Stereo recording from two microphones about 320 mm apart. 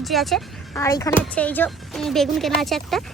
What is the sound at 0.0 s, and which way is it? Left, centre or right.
A woman's voice, centre.